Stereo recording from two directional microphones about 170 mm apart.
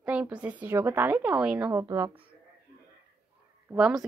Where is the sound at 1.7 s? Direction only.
20° right (ahead or behind).